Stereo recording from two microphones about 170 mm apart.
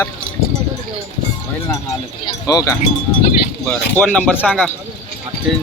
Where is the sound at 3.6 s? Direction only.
5° left (ahead or behind).